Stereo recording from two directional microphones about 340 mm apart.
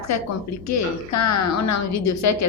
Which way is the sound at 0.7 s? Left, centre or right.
Left.